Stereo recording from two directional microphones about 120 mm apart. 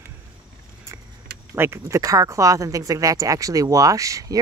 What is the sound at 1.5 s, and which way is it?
Speech, 20° right (ahead or behind).